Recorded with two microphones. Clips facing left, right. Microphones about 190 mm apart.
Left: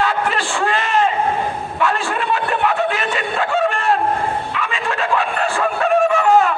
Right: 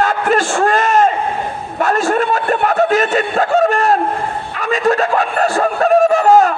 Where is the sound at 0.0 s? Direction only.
45° right (ahead or behind).